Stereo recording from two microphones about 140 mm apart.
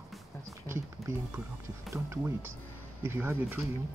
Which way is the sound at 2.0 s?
20° right (ahead or behind).